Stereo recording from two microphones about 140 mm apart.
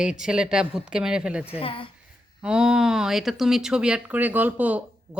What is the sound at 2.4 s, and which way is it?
A woman's voice, 5° right (ahead or behind).